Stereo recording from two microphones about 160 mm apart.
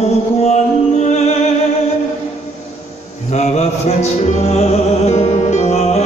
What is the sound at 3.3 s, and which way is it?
Music, 45° left (ahead or behind).